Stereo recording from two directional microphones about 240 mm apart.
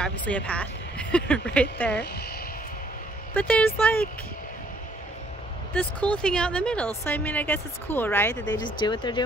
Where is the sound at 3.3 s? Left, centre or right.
Centre.